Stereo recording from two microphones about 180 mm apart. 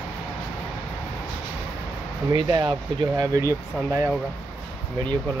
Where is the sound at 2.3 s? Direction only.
25° right (ahead or behind).